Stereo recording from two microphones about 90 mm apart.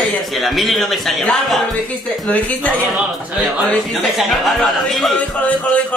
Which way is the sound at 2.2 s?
15° left (ahead or behind).